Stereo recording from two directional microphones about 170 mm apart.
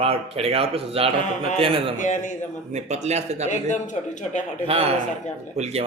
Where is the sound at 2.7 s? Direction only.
40° right (ahead or behind).